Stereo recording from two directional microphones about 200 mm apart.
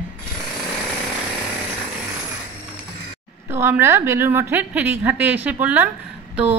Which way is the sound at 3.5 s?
10° right (ahead or behind).